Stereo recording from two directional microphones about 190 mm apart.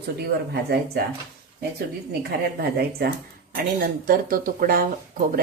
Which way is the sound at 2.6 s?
55° right (ahead or behind).